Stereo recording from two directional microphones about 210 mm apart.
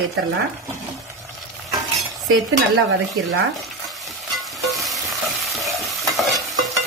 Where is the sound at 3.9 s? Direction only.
Centre (ahead or behind).